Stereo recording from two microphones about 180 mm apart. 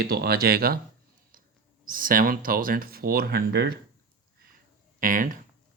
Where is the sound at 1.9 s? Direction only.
50° right (ahead or behind).